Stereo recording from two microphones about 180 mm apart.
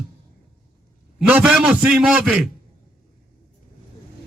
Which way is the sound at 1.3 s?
5° right (ahead or behind).